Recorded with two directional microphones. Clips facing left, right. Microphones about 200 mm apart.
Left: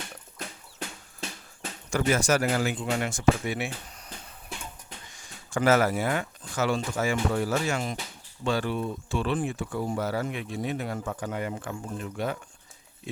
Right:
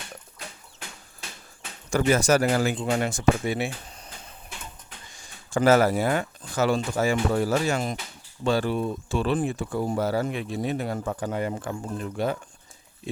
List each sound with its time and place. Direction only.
1.9 s speech: 35° right (ahead or behind)
5.1 s speech: 30° right (ahead or behind)